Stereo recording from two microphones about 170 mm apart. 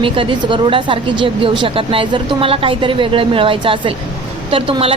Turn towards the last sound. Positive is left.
turn(degrees=-35)  # may be behind; listen again after turning